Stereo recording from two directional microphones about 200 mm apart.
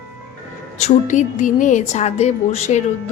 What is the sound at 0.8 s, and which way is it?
A woman's voice, 35° left (ahead or behind).